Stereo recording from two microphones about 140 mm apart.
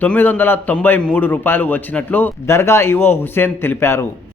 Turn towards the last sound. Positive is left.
turn(degrees=20)  # may be behind; listen again after turning